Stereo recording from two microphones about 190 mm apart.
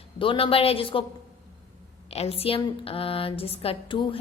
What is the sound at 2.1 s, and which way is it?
Speech, 30° left (ahead or behind).